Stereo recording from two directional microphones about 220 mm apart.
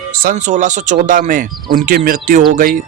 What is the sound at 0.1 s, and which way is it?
A man's voice, 40° right (ahead or behind).